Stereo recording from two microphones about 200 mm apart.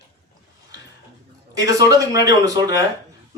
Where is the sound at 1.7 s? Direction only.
15° right (ahead or behind).